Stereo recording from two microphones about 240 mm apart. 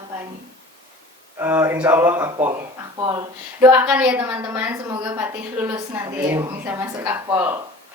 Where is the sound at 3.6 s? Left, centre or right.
Centre.